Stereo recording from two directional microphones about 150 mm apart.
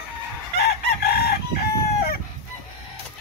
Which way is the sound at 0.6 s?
90° left.